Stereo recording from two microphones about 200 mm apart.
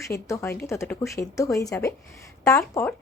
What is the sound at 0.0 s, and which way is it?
A woman's voice, 15° left (ahead or behind).